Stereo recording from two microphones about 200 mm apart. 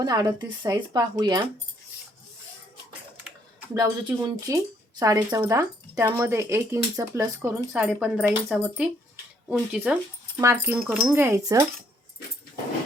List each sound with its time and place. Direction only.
0.0 s speech: 20° right (ahead or behind)
3.8 s speech: 20° right (ahead or behind)